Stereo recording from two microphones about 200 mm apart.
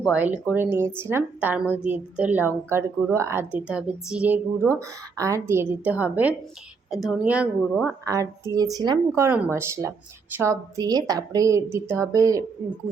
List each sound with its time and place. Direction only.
0.0 s a woman's voice: 5° right (ahead or behind)